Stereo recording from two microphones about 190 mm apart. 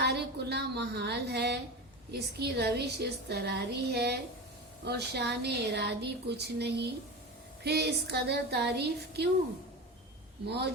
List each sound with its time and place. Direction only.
0.0 s a woman's voice: 60° right (ahead or behind)
10.4 s a woman's voice: 60° right (ahead or behind)